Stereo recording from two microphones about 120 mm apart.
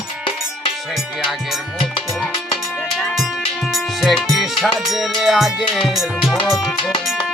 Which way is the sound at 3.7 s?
Centre (ahead or behind).